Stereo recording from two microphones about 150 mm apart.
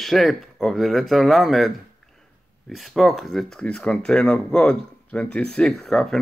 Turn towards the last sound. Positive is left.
turn(degrees=5)  # may be behind; listen again after turning